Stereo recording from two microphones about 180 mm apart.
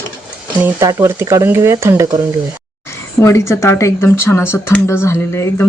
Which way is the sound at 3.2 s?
15° left (ahead or behind).